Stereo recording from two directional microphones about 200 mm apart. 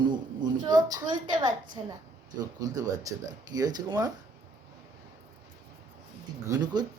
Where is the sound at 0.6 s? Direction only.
20° right (ahead or behind).